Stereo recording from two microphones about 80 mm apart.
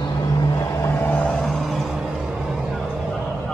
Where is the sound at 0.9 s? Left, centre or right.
Centre.